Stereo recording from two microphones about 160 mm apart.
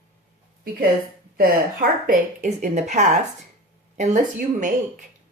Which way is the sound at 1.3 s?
65° right (ahead or behind).